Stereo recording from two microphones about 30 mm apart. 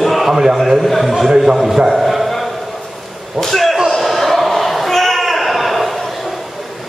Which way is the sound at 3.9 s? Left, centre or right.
Centre.